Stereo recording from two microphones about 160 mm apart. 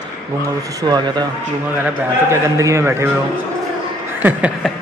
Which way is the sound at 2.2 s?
20° right (ahead or behind).